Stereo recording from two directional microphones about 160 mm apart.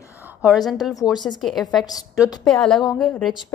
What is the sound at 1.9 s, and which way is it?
Speech, 25° left (ahead or behind).